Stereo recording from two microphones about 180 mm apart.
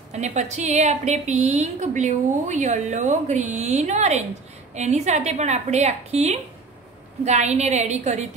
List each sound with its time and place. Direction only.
0.1 s a woman's voice: 40° right (ahead or behind)